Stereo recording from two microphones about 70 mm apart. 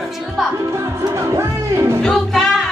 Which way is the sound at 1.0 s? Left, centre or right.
Right.